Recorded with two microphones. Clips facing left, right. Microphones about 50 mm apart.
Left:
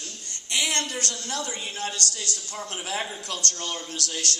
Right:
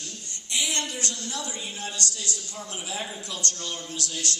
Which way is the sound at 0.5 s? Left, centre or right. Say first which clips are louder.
Left 2 dB; left.